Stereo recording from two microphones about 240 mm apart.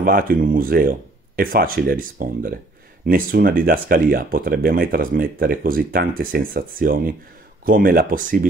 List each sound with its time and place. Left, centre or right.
0.0 s speech: right